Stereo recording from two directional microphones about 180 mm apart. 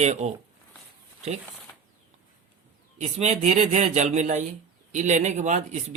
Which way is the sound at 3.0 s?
40° right (ahead or behind).